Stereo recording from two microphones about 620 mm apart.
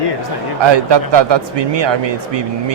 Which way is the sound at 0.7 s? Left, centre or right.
Right.